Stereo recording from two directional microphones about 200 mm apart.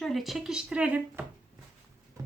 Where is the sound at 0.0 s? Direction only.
Centre (ahead or behind).